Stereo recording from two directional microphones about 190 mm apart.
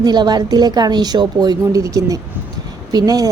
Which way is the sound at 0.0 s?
20° right (ahead or behind).